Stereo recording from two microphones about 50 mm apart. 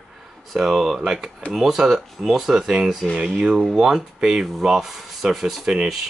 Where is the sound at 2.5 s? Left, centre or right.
Centre.